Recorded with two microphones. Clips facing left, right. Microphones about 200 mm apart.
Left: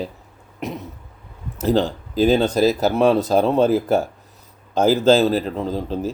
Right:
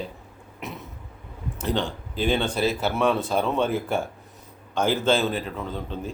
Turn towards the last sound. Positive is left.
turn(degrees=35)  # may be behind; listen again after turning